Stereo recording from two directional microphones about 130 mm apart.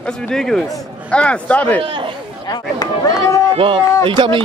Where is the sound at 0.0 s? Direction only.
5° left (ahead or behind).